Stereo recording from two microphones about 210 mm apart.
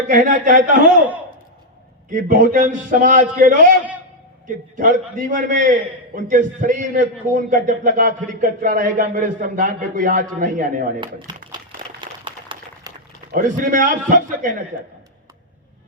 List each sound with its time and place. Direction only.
0.1 s a man's voice: 40° right (ahead or behind)
2.0 s a man's voice: 40° right (ahead or behind)
11.3 s a sound: 20° right (ahead or behind)
13.3 s a man's voice: 40° right (ahead or behind)